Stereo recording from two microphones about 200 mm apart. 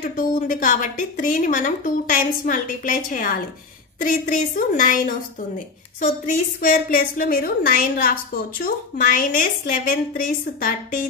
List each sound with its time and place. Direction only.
0.0 s a woman's voice: 40° left (ahead or behind)